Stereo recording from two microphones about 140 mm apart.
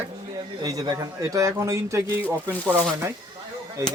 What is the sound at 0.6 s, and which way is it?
A man's voice, 25° right (ahead or behind).